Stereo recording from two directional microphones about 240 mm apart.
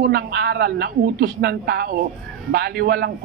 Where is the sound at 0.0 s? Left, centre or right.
Right.